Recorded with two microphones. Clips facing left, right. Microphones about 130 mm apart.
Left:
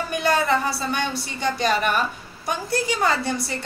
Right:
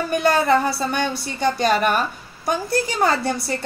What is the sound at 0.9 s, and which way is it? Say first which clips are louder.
A woman's voice: right 3 dB; 45° right (ahead or behind).